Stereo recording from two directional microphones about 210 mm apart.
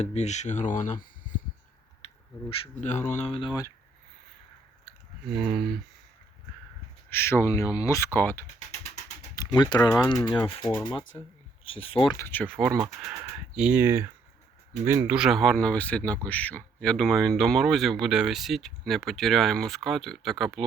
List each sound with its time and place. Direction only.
0.0 s speech: 30° left (ahead or behind)
2.5 s speech: 35° left (ahead or behind)
5.3 s speech: 5° right (ahead or behind)
7.1 s speech: 10° left (ahead or behind)
8.5 s a sound: 35° left (ahead or behind)
9.3 s speech: 20° left (ahead or behind)
12.1 s speech: 10° left (ahead or behind)
13.1 s speech: 5° right (ahead or behind)